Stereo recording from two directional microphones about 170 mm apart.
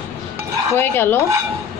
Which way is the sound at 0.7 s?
10° left (ahead or behind).